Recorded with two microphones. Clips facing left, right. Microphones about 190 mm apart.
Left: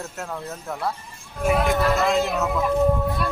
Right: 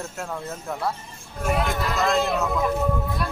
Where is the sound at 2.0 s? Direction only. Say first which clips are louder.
Left 1 dB; 5° left (ahead or behind).